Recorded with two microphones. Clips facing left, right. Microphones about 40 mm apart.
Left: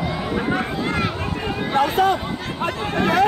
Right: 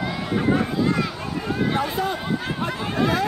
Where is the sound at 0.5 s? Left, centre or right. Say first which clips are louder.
Right 1 dB; left.